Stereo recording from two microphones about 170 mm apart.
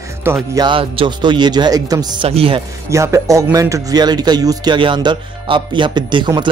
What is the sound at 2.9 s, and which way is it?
A man's voice, 15° right (ahead or behind).